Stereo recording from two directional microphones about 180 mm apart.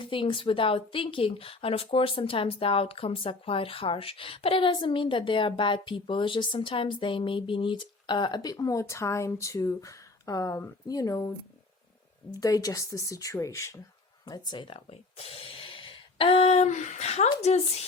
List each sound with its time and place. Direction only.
0.0 s a woman's voice: 30° left (ahead or behind)
12.3 s a woman's voice: 20° left (ahead or behind); by 17.8 s 40° left (ahead or behind)